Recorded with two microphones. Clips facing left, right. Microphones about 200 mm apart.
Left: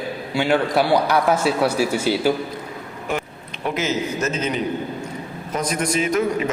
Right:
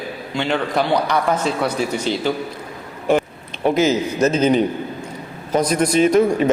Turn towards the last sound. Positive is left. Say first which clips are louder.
# right 6 dB
turn(degrees=-30)  # may be behind; listen again after turning